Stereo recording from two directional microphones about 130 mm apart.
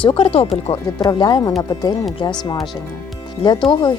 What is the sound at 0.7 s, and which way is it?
Speech, 30° left (ahead or behind).